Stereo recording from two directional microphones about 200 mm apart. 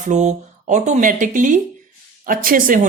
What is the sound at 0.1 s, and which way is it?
Speech, 35° right (ahead or behind).